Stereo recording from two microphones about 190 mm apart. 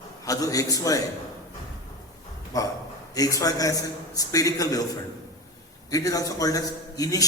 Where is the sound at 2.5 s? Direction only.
20° left (ahead or behind).